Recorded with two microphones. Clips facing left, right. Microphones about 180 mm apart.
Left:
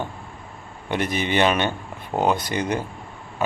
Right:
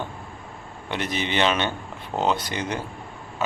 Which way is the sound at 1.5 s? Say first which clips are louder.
Left 2 dB; 10° left (ahead or behind).